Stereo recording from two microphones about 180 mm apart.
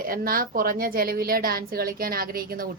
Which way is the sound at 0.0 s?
55° right (ahead or behind).